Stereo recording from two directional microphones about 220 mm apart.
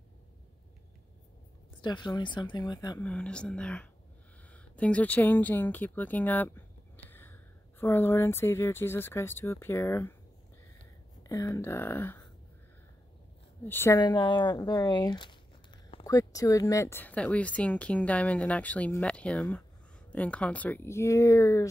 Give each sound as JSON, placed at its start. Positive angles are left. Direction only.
{"t": 1.8, "sound": "speech", "side_deg": 20}
{"t": 3.0, "sound": "speech", "side_deg": 5}
{"t": 11.2, "sound": "speech", "side_deg": 15}
{"t": 13.7, "sound": "speech", "side_deg": 10}